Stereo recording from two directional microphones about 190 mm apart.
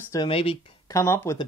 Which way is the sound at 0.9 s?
15° left (ahead or behind).